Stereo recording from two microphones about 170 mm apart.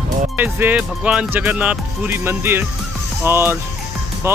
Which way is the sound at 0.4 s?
10° right (ahead or behind).